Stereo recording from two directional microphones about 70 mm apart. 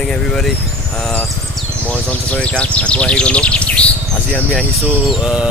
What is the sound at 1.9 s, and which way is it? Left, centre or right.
Speech, centre.